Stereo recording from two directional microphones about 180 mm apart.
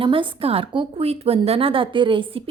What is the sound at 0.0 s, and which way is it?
A woman's voice, 30° right (ahead or behind).